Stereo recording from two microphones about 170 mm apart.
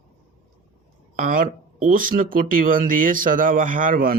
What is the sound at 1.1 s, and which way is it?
Speech, 50° right (ahead or behind).